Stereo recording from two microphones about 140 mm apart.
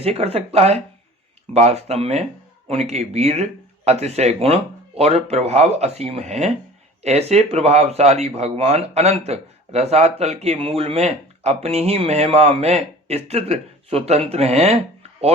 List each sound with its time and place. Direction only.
0.0 s speech: 45° right (ahead or behind)